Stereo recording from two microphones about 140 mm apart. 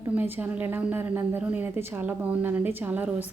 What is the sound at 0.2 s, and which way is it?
A woman's voice, 15° right (ahead or behind).